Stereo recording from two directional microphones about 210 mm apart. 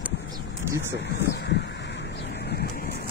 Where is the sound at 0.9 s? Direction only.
55° left (ahead or behind).